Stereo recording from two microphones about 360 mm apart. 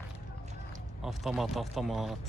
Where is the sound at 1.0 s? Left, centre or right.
Centre.